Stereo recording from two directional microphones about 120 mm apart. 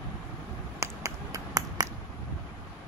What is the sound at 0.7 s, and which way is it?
Finger snapping, 25° right (ahead or behind).